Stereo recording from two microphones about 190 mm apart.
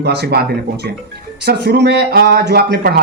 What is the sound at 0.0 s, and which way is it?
Speech, 60° right (ahead or behind).